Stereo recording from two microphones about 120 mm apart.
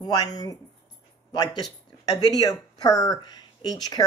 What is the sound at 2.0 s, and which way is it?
Speech, 30° left (ahead or behind).